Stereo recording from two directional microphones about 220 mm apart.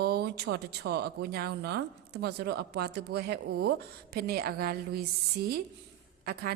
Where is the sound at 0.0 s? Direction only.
45° right (ahead or behind).